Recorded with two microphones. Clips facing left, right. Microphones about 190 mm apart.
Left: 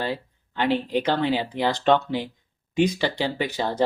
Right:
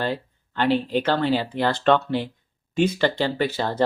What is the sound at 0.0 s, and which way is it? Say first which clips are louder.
Speech: right 2 dB; 10° left (ahead or behind).